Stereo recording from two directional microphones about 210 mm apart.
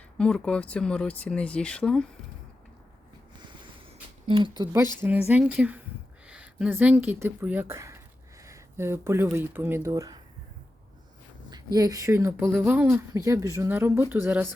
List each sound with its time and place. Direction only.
0.2 s speech: 5° left (ahead or behind)
4.3 s speech: 25° right (ahead or behind)
11.5 s speech: 15° right (ahead or behind)